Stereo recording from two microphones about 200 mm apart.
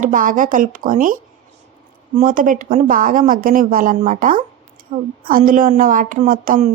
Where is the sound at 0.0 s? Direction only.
40° right (ahead or behind).